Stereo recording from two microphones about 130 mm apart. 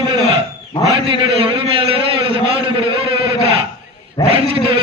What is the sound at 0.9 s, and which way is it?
A man's voice, 45° right (ahead or behind).